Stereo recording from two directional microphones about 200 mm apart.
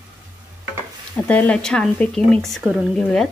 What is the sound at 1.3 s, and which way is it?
A woman's voice, 5° left (ahead or behind).